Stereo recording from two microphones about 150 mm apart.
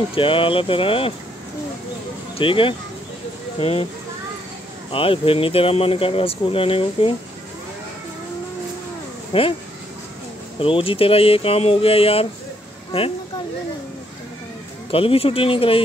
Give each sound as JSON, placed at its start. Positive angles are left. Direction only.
{"t": 0.1, "sound": "speech", "side_deg": 35}
{"t": 2.3, "sound": "speech", "side_deg": 35}
{"t": 4.9, "sound": "speech", "side_deg": 35}
{"t": 9.3, "sound": "speech", "side_deg": 40}
{"t": 10.6, "sound": "speech", "side_deg": 35}
{"t": 14.9, "sound": "speech", "side_deg": 40}